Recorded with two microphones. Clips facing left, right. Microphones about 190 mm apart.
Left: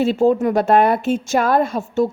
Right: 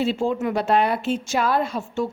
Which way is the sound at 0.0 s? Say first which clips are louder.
Left 7 dB; 45° left (ahead or behind).